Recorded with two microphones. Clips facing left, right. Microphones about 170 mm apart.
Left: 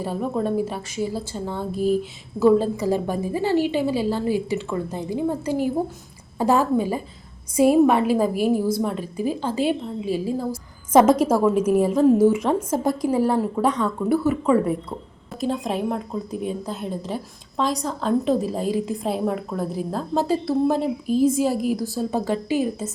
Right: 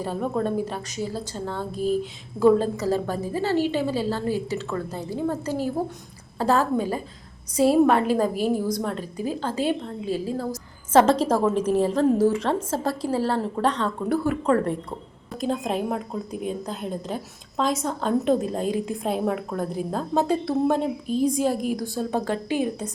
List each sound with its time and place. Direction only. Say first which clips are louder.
0.0 s a woman's voice: left 1 dB; 5° left (ahead or behind)